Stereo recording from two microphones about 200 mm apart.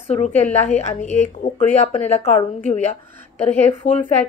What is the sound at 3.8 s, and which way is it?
Speech, 40° left (ahead or behind).